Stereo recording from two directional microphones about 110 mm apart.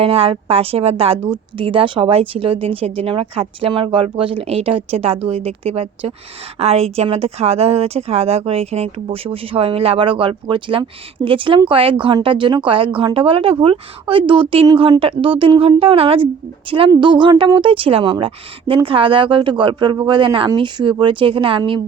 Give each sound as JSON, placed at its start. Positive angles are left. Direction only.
{"t": 0.0, "sound": "speech", "side_deg": -60}
{"t": 6.6, "sound": "speech", "side_deg": -70}